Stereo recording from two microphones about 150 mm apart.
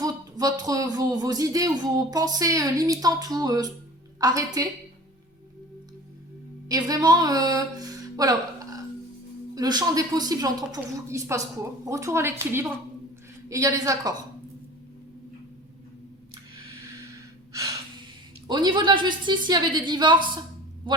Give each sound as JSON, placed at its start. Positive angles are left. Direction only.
{"t": 0.0, "sound": "speech", "side_deg": -25}
{"t": 6.7, "sound": "speech", "side_deg": -25}
{"t": 18.4, "sound": "a woman's voice", "side_deg": -30}